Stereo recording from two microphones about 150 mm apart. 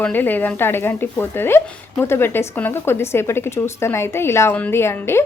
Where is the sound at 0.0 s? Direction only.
10° left (ahead or behind).